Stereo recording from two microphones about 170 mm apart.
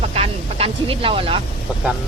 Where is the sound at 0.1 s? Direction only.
35° right (ahead or behind).